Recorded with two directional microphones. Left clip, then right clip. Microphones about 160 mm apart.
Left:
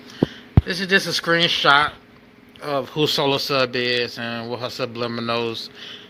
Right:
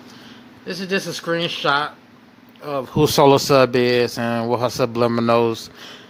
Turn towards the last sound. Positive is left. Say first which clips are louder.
# right 7 dB
turn(degrees=-40)  # may be behind; listen again after turning